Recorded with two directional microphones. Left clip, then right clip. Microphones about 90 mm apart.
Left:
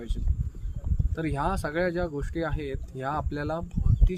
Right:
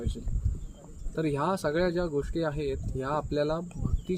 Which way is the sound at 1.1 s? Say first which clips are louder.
Right 1 dB; 40° left (ahead or behind).